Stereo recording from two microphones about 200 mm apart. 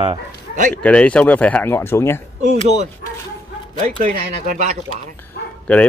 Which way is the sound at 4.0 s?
45° right (ahead or behind).